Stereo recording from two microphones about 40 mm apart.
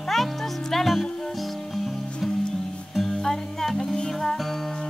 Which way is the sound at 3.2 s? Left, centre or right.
Centre.